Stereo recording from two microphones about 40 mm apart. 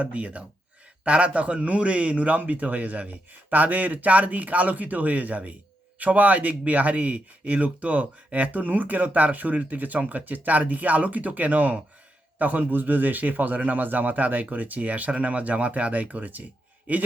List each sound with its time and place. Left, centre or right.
0.0 s speech: right